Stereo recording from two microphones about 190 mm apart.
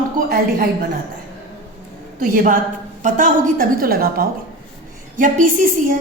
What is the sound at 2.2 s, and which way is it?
A woman's voice, 45° right (ahead or behind).